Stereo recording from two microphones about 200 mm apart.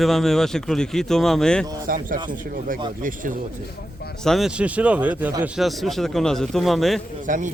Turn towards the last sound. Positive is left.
turn(degrees=-40)  # may be behind; listen again after turning